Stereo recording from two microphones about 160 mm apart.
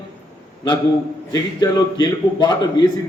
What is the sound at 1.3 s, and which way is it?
A man's voice, 25° left (ahead or behind).